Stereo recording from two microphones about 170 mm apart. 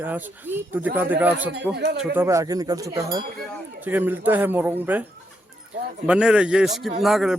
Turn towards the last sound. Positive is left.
turn(degrees=0)  # may be behind; listen again after turning